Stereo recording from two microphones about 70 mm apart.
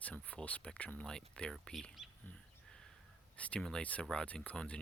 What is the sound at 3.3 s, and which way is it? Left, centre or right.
Speech, centre.